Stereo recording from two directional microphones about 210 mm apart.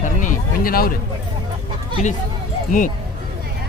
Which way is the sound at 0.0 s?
40° left (ahead or behind).